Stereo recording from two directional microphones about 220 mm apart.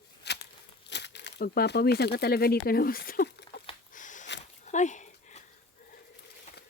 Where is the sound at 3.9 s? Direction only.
35° left (ahead or behind).